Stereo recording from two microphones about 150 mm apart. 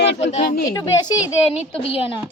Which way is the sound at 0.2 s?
50° left (ahead or behind).